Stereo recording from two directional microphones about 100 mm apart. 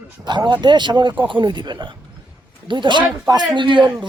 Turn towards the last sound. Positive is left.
turn(degrees=-55)  # may be behind; listen again after turning